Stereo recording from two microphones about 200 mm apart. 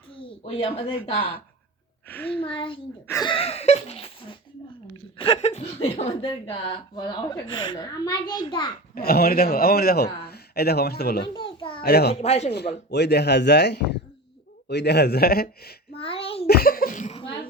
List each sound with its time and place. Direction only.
0.1 s speech: 25° left (ahead or behind)
2.0 s a woman's voice: 10° left (ahead or behind)
2.4 s speech: 25° left (ahead or behind)
9.0 s a man's voice: 50° left (ahead or behind)
11.3 s a sound: 25° left (ahead or behind)
11.8 s a man's voice: 55° left (ahead or behind)
12.2 s speech: 35° left (ahead or behind)
12.5 s speech: 55° left (ahead or behind)
16.0 s a sound: 30° left (ahead or behind)
16.5 s cough: 50° left (ahead or behind)